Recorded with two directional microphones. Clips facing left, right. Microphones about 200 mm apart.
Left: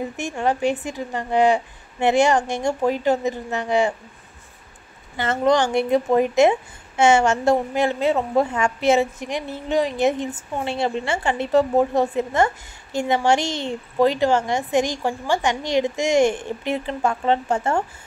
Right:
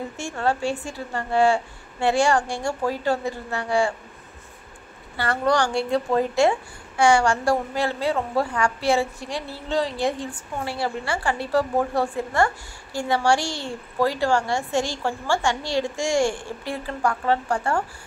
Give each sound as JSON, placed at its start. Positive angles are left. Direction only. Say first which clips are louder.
{"t": 0.2, "sound": "a woman's voice", "louder": "left 3 dB", "side_deg": 20}
{"t": 5.1, "sound": "a woman's voice", "louder": "left 3 dB", "side_deg": 20}